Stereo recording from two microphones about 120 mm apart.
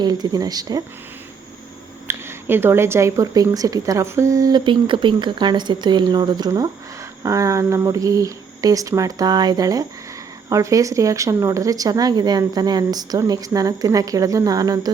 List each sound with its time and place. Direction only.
0.0 s speech: 35° right (ahead or behind)
2.0 s speech: 20° right (ahead or behind)